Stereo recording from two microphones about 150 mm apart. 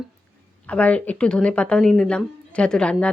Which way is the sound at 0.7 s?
10° left (ahead or behind).